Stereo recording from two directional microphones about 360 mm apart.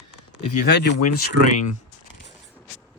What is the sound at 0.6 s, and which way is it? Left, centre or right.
Speech, left.